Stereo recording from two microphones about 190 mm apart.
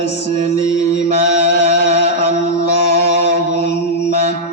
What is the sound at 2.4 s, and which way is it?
Mantra, 60° left (ahead or behind).